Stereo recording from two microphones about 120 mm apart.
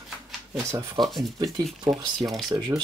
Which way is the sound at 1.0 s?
Centre (ahead or behind).